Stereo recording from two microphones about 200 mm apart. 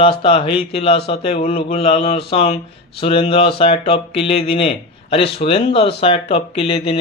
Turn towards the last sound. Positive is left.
turn(degrees=30)  # may be behind; listen again after turning